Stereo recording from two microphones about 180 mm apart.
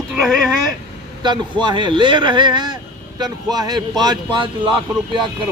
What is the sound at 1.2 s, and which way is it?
Speech, 25° right (ahead or behind).